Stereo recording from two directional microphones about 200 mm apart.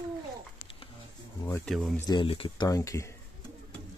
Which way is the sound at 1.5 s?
10° left (ahead or behind).